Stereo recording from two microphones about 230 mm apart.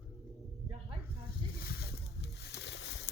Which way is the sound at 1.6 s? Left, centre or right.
Left.